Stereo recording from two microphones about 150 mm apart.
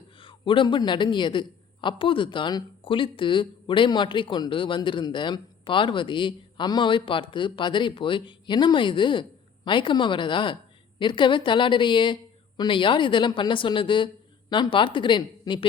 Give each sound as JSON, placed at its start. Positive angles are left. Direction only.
{"t": 0.2, "sound": "a man's voice", "side_deg": 35}